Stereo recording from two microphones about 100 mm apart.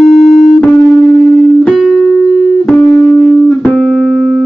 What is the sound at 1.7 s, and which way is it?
Music, centre (ahead or behind).